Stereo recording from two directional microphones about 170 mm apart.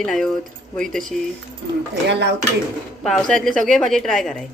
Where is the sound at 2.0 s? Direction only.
90° right.